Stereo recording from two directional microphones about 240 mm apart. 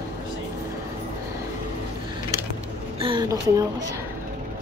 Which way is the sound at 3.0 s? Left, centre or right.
Centre.